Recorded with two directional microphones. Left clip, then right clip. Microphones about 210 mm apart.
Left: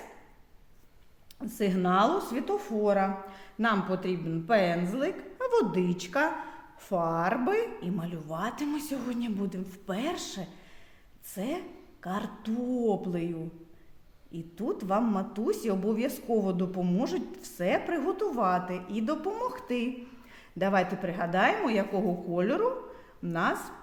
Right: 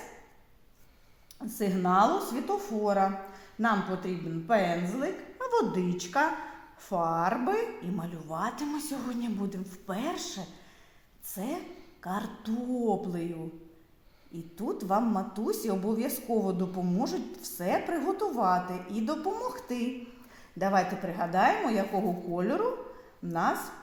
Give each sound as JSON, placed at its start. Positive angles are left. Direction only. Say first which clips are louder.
{"t": 1.4, "sound": "a woman's voice", "louder": "left 1 dB", "side_deg": 30}
{"t": 14.3, "sound": "a woman's voice", "louder": "left 1 dB", "side_deg": 30}